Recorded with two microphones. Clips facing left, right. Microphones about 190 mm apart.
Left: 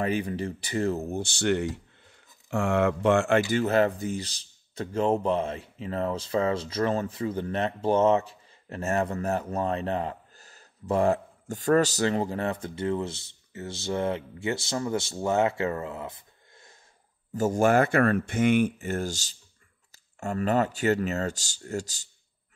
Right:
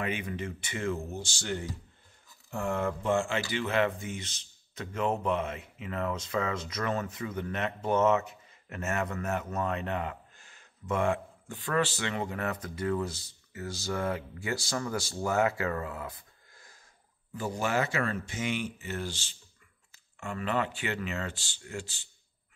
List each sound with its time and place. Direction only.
0.0 s a man's voice: 35° left (ahead or behind)
1.1 s speech: 60° left (ahead or behind)
2.5 s speech: 80° left
3.3 s a man's voice: 45° left (ahead or behind); by 16.7 s 25° left (ahead or behind)
17.3 s a man's voice: 45° left (ahead or behind)